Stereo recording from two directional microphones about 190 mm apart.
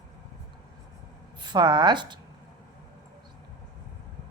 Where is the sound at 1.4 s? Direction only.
20° right (ahead or behind).